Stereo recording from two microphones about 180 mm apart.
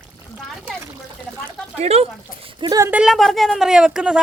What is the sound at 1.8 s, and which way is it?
Speech, 35° right (ahead or behind).